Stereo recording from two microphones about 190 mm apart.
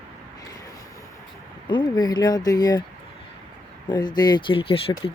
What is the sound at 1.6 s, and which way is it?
Speech, 25° left (ahead or behind).